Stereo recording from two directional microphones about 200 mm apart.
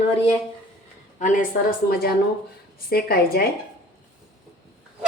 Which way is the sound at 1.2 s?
40° left (ahead or behind).